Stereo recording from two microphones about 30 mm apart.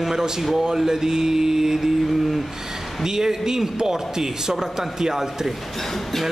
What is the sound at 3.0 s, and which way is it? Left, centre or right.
Speech, centre.